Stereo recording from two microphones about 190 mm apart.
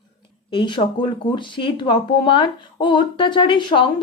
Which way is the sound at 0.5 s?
25° left (ahead or behind).